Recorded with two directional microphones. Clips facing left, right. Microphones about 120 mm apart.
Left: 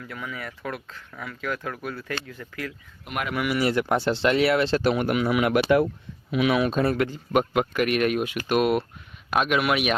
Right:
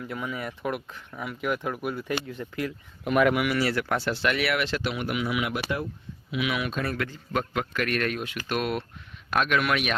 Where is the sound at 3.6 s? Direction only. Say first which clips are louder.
Left 4 dB; 20° left (ahead or behind); by 5.6 s 50° left (ahead or behind).